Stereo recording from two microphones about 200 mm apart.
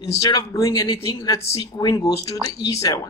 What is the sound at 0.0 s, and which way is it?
A man's voice, 15° left (ahead or behind).